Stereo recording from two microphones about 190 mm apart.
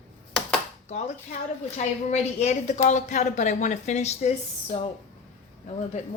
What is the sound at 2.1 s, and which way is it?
A woman's voice, 35° left (ahead or behind).